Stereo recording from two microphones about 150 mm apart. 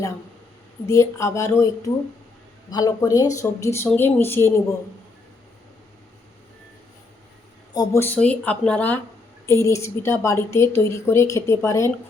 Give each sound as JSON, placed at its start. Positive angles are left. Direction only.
{"t": 0.9, "sound": "a woman's voice", "side_deg": 20}
{"t": 7.7, "sound": "speech", "side_deg": 25}
{"t": 8.0, "sound": "a woman's voice", "side_deg": 10}